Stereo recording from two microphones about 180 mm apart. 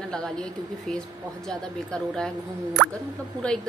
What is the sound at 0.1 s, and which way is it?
Speech, 5° left (ahead or behind).